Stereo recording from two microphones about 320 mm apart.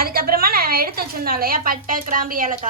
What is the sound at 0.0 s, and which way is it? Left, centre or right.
A woman's voice, right.